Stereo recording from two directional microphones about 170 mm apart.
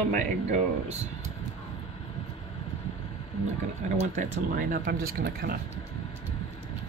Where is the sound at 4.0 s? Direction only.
55° right (ahead or behind).